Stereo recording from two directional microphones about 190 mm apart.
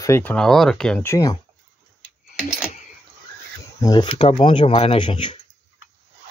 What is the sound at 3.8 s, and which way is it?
Speech, 20° left (ahead or behind).